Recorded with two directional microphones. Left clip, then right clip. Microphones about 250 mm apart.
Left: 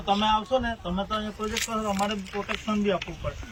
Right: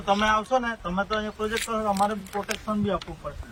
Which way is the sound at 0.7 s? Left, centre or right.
Right.